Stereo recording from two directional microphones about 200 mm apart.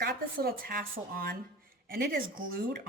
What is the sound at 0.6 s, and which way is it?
A woman's voice, 45° right (ahead or behind).